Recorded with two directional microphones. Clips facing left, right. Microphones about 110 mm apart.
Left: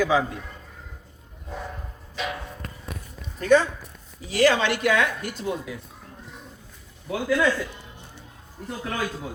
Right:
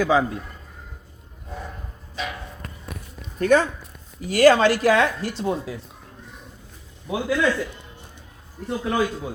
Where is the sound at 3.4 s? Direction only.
50° right (ahead or behind); by 5.7 s 30° right (ahead or behind).